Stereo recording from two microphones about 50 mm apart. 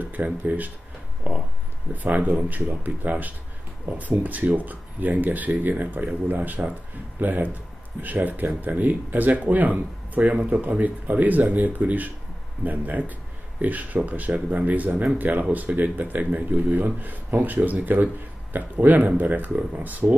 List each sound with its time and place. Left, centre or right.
0.0 s speech: right
1.3 s a sound: right
2.0 s speech: right